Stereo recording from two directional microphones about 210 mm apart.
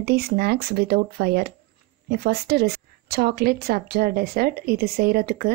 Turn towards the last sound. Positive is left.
turn(degrees=-45)  # may be behind; listen again after turning